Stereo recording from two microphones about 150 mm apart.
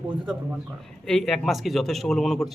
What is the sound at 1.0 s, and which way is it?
A man's voice, 5° left (ahead or behind).